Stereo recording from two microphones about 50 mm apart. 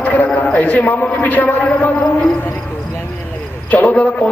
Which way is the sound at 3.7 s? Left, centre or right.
Left.